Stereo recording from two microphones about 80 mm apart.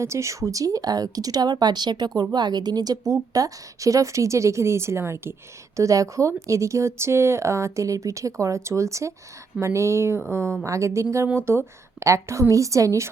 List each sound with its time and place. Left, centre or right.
0.0 s a woman's voice: right